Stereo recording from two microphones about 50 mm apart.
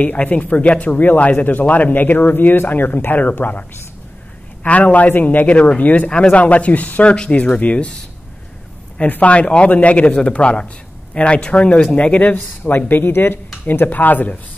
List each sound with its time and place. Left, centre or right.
0.0 s speech: left
4.6 s speech: left
9.0 s speech: left